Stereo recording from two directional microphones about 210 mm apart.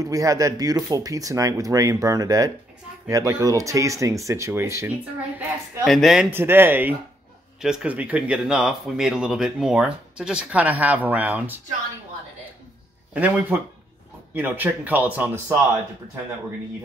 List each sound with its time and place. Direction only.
0.0 s speech: 15° right (ahead or behind); by 6.2 s centre (ahead or behind)
6.3 s speech: 10° right (ahead or behind)
13.1 s speech: 5° right (ahead or behind)